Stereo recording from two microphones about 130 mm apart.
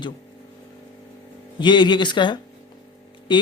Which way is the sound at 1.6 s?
35° left (ahead or behind).